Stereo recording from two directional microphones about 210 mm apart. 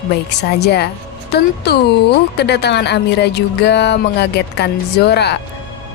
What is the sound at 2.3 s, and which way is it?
Speech, 55° left (ahead or behind).